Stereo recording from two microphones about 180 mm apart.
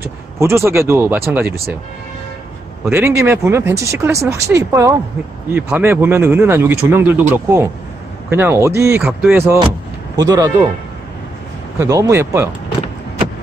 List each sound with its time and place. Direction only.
0.0 s speech: 15° right (ahead or behind)
2.9 s speech: 15° right (ahead or behind)
9.0 s speech: centre (ahead or behind)
10.1 s speech: 20° right (ahead or behind)
11.8 s speech: 15° right (ahead or behind)